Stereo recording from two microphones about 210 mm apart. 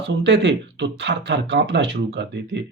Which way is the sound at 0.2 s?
55° right (ahead or behind).